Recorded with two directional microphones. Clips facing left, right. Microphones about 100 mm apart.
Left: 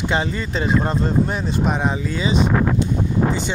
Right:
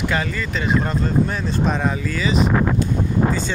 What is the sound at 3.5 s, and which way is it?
Speech, 20° left (ahead or behind).